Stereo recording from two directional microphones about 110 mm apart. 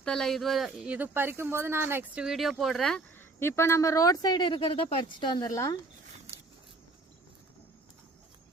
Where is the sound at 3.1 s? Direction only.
20° left (ahead or behind).